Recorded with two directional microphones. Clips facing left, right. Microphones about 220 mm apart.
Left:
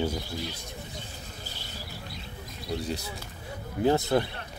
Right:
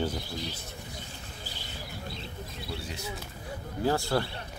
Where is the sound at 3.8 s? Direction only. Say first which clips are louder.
Left 4 dB; 20° left (ahead or behind).